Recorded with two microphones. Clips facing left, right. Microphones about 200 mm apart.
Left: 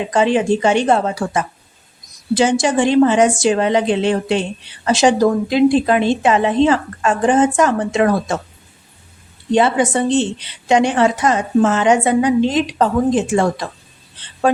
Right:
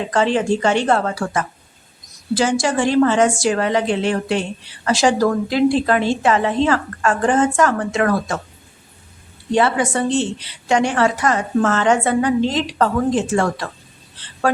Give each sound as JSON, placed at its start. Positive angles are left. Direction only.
{"t": 0.0, "sound": "a woman's voice", "side_deg": 15}
{"t": 9.5, "sound": "a woman's voice", "side_deg": 20}